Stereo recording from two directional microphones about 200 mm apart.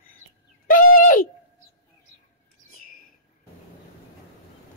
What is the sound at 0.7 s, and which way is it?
Bird, 40° left (ahead or behind).